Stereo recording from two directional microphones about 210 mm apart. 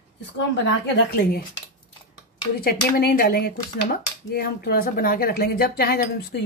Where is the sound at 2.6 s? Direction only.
45° left (ahead or behind).